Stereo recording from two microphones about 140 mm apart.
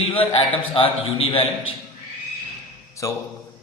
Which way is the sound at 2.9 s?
20° left (ahead or behind).